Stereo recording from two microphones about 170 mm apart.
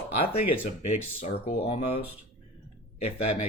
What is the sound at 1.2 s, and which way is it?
Speech, 45° left (ahead or behind).